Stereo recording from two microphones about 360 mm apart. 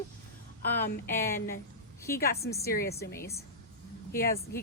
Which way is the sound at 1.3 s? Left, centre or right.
Left.